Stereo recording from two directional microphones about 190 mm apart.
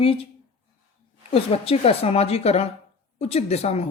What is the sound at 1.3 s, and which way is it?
Speech, 30° left (ahead or behind).